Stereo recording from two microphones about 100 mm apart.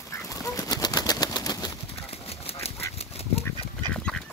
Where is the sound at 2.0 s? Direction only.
80° left.